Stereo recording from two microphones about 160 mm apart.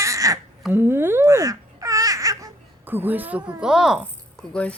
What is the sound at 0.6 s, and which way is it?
Speech, 10° right (ahead or behind).